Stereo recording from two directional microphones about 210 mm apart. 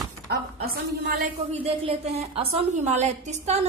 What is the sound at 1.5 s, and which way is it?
A woman's voice, 30° right (ahead or behind).